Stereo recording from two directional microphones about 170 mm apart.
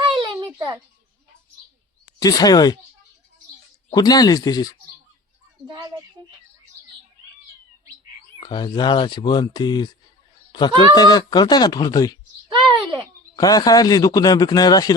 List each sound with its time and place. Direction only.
0.0 s a sound: 30° right (ahead or behind)
2.1 s speech: 20° left (ahead or behind)
3.9 s speech: 20° left (ahead or behind)
5.6 s speech: 25° right (ahead or behind)
8.4 s speech: 25° left (ahead or behind)
12.5 s a sound: 30° right (ahead or behind)
13.3 s speech: 25° left (ahead or behind)